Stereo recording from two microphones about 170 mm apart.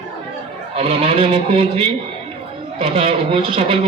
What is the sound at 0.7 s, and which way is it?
Speech, 35° right (ahead or behind).